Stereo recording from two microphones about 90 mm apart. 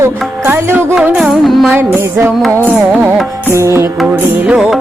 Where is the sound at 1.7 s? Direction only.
25° right (ahead or behind).